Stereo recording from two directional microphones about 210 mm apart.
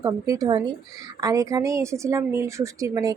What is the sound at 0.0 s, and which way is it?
A woman's voice, 15° right (ahead or behind).